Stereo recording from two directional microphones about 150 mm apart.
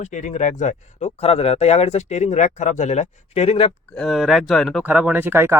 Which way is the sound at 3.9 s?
Centre (ahead or behind).